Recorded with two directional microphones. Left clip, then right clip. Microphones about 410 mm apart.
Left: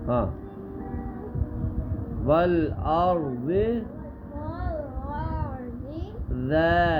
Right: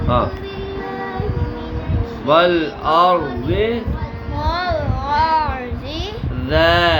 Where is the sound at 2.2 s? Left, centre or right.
Centre.